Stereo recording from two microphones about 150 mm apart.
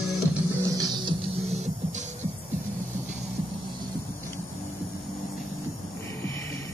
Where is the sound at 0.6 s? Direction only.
25° right (ahead or behind).